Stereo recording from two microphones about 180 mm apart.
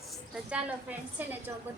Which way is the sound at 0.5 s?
10° right (ahead or behind).